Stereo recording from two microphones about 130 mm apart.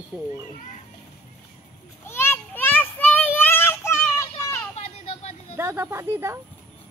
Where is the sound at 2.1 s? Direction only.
20° left (ahead or behind).